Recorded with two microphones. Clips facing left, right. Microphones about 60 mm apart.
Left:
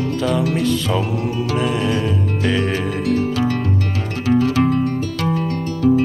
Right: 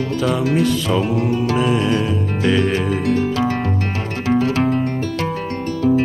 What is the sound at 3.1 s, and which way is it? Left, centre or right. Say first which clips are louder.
Music: left 1 dB; right.